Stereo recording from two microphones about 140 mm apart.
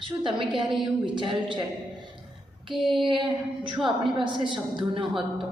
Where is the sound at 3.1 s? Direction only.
35° right (ahead or behind).